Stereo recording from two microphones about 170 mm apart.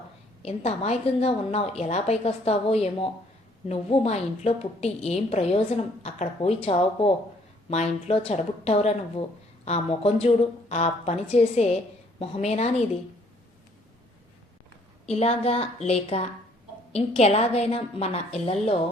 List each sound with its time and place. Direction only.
0.4 s a woman's voice: 40° left (ahead or behind)
15.0 s a woman's voice: 40° left (ahead or behind)